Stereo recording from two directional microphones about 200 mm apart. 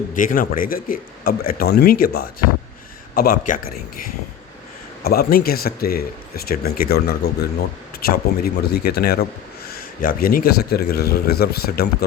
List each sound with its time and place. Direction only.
0.1 s speech: 45° left (ahead or behind)
5.0 s speech: 50° left (ahead or behind)